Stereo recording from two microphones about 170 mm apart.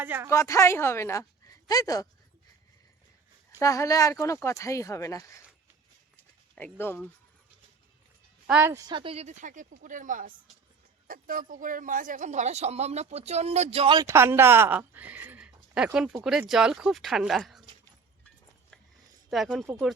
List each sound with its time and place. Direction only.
0.0 s speech: 10° right (ahead or behind)
0.3 s speech: 15° left (ahead or behind)
3.6 s speech: 20° left (ahead or behind)
6.6 s speech: 10° left (ahead or behind)
8.4 s a woman's voice: 10° right (ahead or behind)
8.9 s a woman's voice: 30° right (ahead or behind); by 17.6 s centre (ahead or behind)
19.3 s speech: centre (ahead or behind)